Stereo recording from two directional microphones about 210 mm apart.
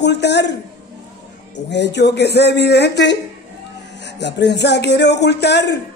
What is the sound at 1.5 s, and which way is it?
Speech, 55° left (ahead or behind).